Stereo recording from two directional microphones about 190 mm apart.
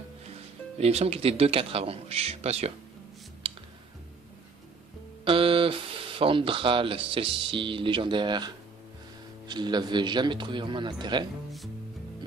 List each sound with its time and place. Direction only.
0.7 s a man's voice: 35° right (ahead or behind)
5.2 s speech: 30° right (ahead or behind)